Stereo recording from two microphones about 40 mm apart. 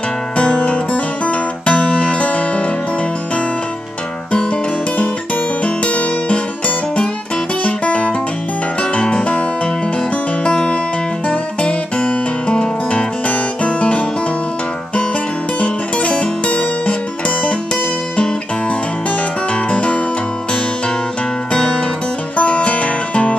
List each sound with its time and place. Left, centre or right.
0.4 s music: left
5.9 s music: left
7.6 s guitar: left
8.9 s music: left
10.4 s music: left
15.6 s music: left
19.7 s music: left
22.4 s music: left